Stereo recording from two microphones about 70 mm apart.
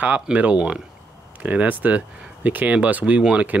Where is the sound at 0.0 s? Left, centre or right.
Centre.